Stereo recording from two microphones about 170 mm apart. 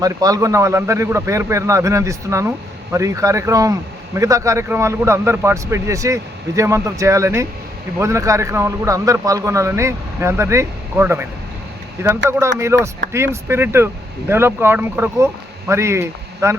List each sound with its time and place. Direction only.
0.0 s a man's voice: 20° right (ahead or behind)